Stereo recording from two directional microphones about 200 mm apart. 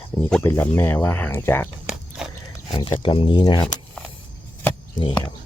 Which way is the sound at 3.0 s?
25° left (ahead or behind).